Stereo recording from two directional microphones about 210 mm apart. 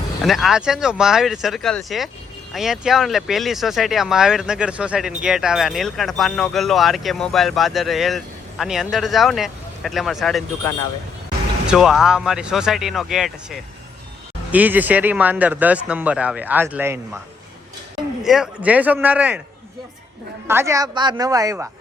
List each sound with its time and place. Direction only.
0.3 s speech: centre (ahead or behind)
11.6 s speech: 5° right (ahead or behind)
18.2 s speech: 5° right (ahead or behind)
20.5 s speech: 15° right (ahead or behind)